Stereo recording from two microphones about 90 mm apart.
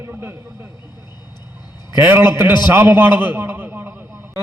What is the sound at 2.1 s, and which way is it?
A man's voice, 25° right (ahead or behind).